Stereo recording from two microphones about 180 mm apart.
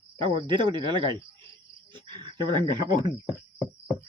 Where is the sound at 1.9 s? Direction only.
25° right (ahead or behind).